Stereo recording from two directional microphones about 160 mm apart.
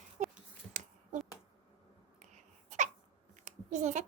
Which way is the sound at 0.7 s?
50° right (ahead or behind).